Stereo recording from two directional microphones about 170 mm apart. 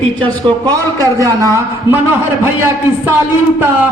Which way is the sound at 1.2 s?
15° right (ahead or behind).